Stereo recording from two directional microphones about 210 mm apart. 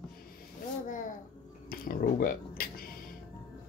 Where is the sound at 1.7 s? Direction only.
45° left (ahead or behind).